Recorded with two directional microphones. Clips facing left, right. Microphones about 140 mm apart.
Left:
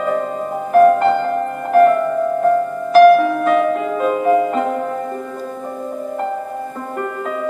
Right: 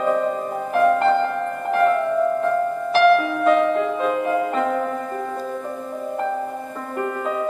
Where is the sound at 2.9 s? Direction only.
45° left (ahead or behind).